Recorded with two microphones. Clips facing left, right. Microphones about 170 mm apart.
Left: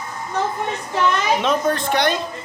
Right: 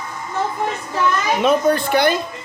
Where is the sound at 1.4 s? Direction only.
5° right (ahead or behind).